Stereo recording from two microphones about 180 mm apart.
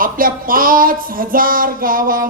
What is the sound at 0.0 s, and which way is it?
Speech, 50° right (ahead or behind).